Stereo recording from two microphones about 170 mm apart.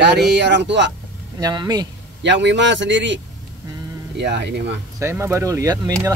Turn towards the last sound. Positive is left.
turn(degrees=-20)  # may be behind; listen again after turning